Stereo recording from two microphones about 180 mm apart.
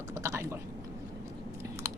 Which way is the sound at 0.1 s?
15° right (ahead or behind).